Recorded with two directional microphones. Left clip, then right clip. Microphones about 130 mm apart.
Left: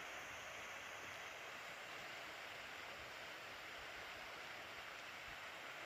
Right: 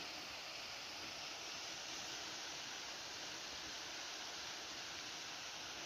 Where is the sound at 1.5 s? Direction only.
35° left (ahead or behind).